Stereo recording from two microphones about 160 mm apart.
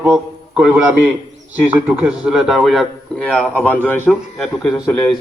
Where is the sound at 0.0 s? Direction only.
5° right (ahead or behind).